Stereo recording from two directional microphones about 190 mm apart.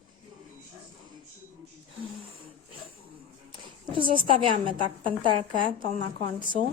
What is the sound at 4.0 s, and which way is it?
Speech, 30° right (ahead or behind).